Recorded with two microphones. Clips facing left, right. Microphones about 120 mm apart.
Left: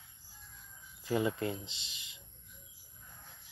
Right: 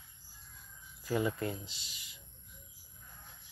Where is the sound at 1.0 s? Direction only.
25° left (ahead or behind).